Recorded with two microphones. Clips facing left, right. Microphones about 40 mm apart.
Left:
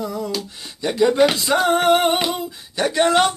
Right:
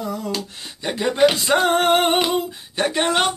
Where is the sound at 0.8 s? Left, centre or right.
Right.